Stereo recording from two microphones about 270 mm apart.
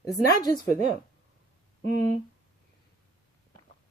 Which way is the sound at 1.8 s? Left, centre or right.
Right.